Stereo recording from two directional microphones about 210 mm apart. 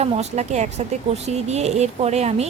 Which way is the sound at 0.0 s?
30° right (ahead or behind).